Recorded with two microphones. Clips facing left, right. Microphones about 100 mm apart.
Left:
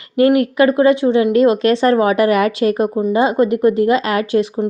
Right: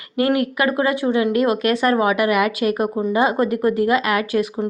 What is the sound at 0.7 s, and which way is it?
A woman's voice, 25° left (ahead or behind).